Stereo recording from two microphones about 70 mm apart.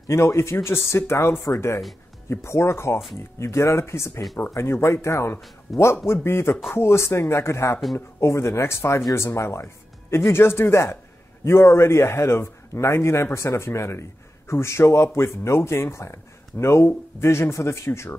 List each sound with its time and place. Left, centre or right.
0.1 s speech: left